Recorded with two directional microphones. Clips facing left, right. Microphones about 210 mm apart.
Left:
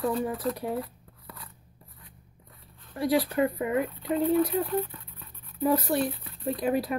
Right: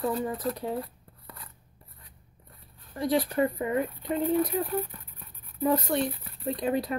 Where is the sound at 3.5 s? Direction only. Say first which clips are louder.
Left 1 dB; 10° left (ahead or behind).